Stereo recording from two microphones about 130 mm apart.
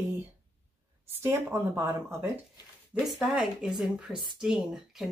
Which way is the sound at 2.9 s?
5° right (ahead or behind).